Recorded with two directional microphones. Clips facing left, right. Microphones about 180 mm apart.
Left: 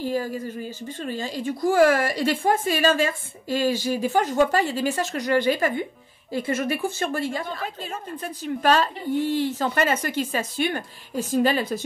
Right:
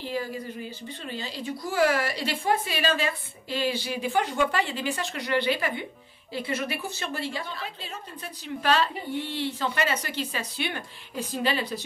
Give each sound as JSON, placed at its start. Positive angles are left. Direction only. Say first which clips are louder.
{"t": 0.0, "sound": "a woman's voice", "louder": "left 5 dB", "side_deg": 45}